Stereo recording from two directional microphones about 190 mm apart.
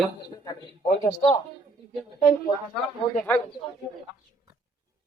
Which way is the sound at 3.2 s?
10° left (ahead or behind).